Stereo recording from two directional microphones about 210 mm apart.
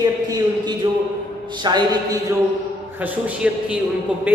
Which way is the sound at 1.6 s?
20° right (ahead or behind).